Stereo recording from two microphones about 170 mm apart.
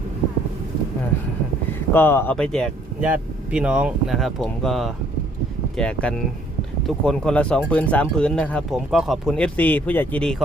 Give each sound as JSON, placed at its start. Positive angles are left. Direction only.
{"t": 1.9, "sound": "speech", "side_deg": 15}